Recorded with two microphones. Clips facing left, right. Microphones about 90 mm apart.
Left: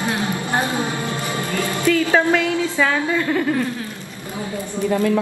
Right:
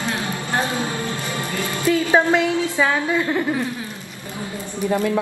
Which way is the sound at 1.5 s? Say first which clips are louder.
Left 1 dB; 20° right (ahead or behind).